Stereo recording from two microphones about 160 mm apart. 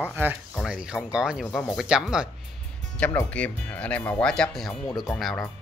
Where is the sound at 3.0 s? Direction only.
10° left (ahead or behind).